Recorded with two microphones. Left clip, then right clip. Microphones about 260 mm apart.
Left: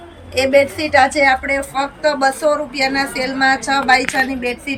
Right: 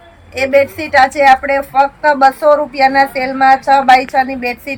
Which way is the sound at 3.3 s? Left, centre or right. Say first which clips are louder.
Right 7 dB; right.